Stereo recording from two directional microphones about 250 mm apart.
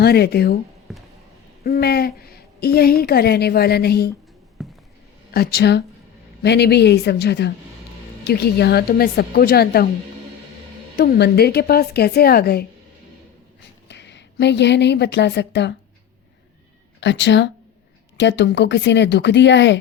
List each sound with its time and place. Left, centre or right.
0.0 s a woman's voice: left
0.9 s a sound: centre
1.6 s a woman's voice: left
4.6 s a sound: centre
5.3 s a woman's voice: left
10.9 s a woman's voice: left
13.8 s a woman's voice: left
17.0 s speech: left